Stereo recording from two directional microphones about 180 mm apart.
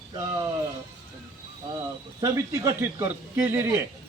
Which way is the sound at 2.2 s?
15° right (ahead or behind).